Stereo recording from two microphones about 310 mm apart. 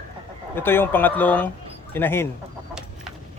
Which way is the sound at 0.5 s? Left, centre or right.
Centre.